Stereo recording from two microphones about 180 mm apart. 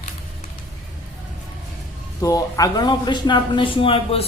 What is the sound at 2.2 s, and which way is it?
Speech, 20° left (ahead or behind).